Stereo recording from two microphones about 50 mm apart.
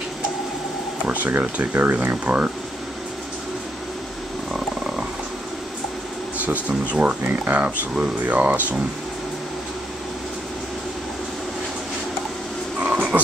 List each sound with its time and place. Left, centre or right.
1.0 s speech: right
4.6 s wild animals: centre
6.4 s speech: right
7.2 s speech: right
7.9 s speech: centre
8.4 s speech: right
13.1 s a sound: right